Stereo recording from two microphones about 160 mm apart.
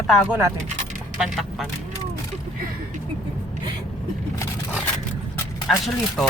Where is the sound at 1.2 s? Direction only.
Centre (ahead or behind).